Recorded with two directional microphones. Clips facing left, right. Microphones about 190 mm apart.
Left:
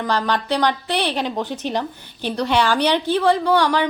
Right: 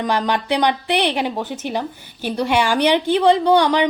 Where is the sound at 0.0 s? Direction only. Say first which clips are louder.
Right 1 dB; 15° right (ahead or behind).